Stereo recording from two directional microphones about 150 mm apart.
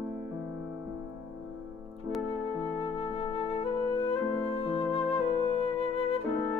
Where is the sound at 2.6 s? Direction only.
40° left (ahead or behind).